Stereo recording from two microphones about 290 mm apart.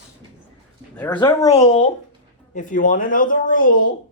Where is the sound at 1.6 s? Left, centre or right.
Left.